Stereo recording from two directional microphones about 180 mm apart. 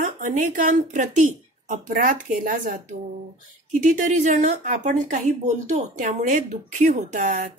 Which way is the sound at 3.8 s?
45° right (ahead or behind).